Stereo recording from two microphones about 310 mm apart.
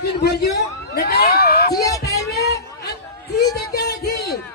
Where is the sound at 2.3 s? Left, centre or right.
Left.